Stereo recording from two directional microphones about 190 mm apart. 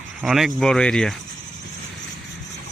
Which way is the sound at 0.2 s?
Centre (ahead or behind).